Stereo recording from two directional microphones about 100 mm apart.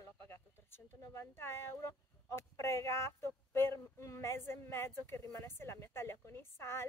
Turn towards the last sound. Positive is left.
turn(degrees=25)  # may be behind; listen again after turning